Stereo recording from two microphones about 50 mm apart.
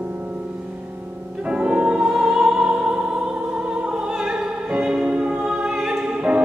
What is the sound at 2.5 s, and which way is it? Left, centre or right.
Opera, centre.